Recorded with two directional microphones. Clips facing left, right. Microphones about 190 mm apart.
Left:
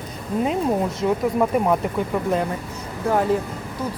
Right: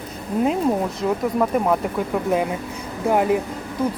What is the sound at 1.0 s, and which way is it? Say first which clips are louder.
Speech: left 1 dB; centre (ahead or behind).